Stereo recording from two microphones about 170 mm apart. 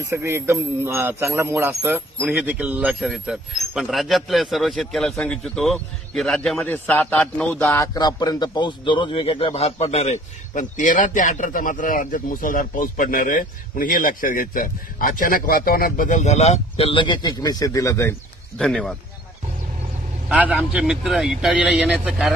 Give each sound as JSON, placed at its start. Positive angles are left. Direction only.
{"t": 0.1, "sound": "a man's voice", "side_deg": -15}
{"t": 18.6, "sound": "speech", "side_deg": 5}
{"t": 20.2, "sound": "speech", "side_deg": -10}